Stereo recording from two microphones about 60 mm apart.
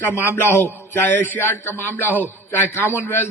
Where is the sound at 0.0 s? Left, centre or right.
Left.